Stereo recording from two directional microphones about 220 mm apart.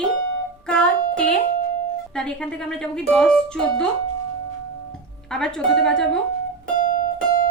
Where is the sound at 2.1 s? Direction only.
5° left (ahead or behind).